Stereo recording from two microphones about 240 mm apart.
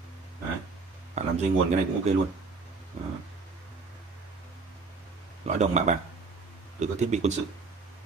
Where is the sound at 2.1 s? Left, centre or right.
Right.